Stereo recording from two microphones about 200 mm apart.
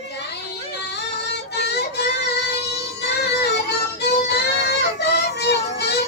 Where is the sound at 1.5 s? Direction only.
55° left (ahead or behind).